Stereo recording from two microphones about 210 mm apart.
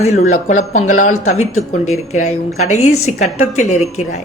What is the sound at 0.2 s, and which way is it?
A woman's voice, 40° left (ahead or behind).